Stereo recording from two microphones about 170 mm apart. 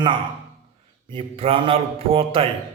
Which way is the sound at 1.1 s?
30° right (ahead or behind).